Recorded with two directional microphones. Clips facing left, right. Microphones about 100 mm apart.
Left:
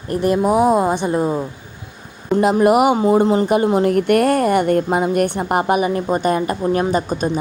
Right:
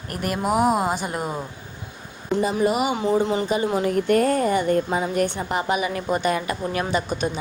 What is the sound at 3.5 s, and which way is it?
A woman's voice, 55° left (ahead or behind).